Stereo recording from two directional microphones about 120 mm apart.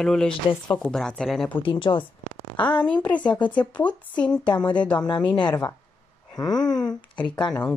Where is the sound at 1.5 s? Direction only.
45° left (ahead or behind).